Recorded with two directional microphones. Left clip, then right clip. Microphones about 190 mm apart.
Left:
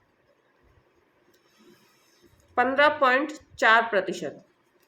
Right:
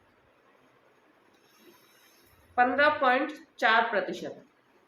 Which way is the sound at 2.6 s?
50° left (ahead or behind).